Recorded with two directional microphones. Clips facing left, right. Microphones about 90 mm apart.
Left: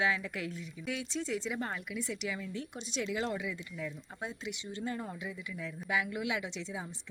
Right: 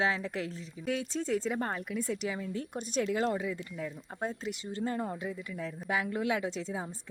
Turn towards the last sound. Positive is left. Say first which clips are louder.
# right 4 dB
turn(degrees=-40)  # may be behind; listen again after turning